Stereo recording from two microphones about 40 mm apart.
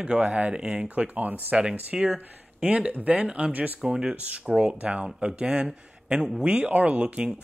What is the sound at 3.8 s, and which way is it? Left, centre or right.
Speech, right.